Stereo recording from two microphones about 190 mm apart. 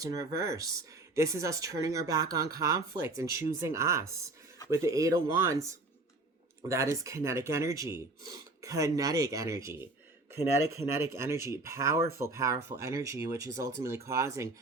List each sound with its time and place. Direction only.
0.0 s speech: 20° right (ahead or behind)